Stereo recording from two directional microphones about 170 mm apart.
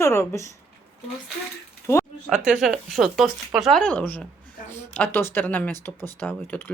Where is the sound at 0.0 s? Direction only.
15° left (ahead or behind).